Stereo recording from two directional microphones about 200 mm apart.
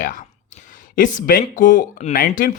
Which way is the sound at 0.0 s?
40° left (ahead or behind).